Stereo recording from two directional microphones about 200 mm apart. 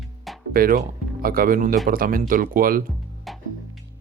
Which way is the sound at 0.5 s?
45° right (ahead or behind).